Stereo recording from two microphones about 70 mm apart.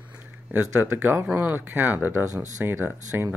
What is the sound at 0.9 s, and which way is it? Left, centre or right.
Speech, right.